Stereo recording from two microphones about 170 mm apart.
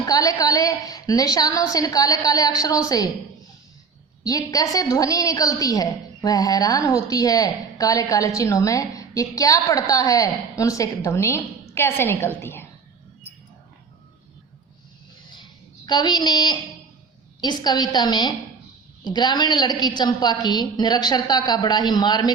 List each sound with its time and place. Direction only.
0.0 s a woman's voice: 20° left (ahead or behind)
4.2 s a woman's voice: 20° left (ahead or behind)
15.9 s a woman's voice: 25° left (ahead or behind)